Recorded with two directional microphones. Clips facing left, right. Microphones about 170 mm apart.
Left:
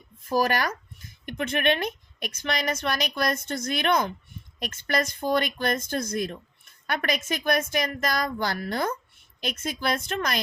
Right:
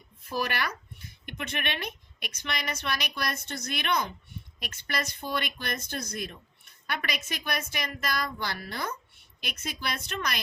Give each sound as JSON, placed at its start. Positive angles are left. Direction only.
{"t": 0.3, "sound": "speech", "side_deg": 40}